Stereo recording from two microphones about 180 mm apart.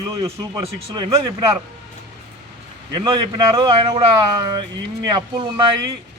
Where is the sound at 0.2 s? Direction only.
30° right (ahead or behind).